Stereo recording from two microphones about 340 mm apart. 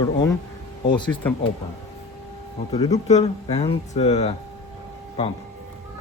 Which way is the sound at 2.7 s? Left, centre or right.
Centre.